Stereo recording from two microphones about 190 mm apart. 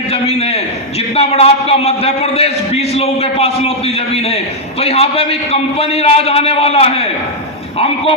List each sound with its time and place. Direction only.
0.1 s a man's voice: 35° left (ahead or behind)